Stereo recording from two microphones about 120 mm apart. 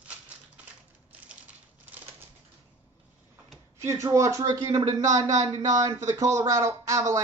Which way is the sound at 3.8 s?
25° right (ahead or behind).